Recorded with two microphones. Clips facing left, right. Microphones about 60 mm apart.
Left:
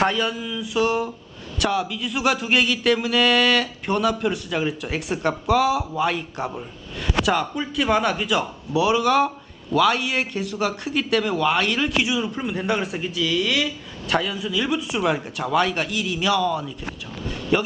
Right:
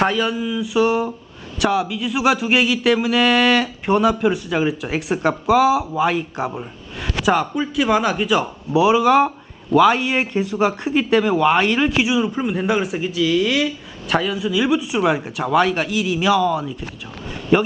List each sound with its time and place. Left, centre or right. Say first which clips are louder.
0.0 s speech: right 3 dB; centre